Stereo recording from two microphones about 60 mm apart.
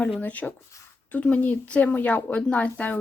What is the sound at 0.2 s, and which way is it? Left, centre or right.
Speech, left.